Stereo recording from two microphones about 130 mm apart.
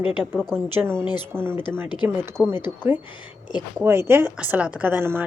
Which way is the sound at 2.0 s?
15° right (ahead or behind).